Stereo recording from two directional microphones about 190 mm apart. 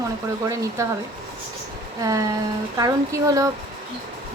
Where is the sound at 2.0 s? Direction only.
15° right (ahead or behind).